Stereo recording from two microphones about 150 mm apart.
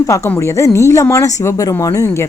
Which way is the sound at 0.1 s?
20° left (ahead or behind).